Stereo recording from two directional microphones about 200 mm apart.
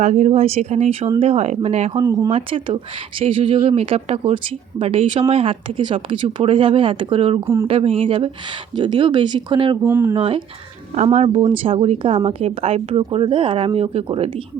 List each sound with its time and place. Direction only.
0.0 s speech: 35° right (ahead or behind)
9.8 s speech: 10° right (ahead or behind)
10.2 s speech: 25° right (ahead or behind)